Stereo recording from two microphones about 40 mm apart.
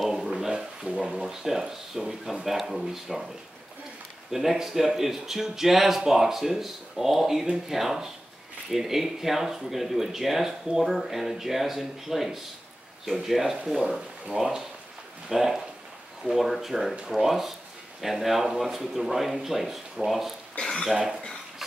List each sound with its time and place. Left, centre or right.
0.8 s speech: right
1.2 s speech: centre
4.3 s speech: centre
20.6 s speech: left
20.9 s speech: centre